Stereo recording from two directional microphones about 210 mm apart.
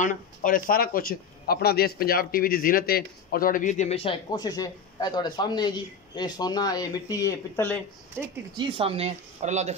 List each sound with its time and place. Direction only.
0.0 s a man's voice: 40° left (ahead or behind); by 7.8 s 10° left (ahead or behind)
8.2 s speech: 25° right (ahead or behind)